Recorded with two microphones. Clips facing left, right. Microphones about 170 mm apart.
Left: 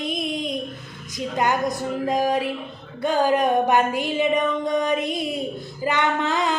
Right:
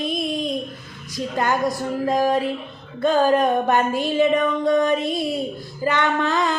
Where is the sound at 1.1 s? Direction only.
20° left (ahead or behind).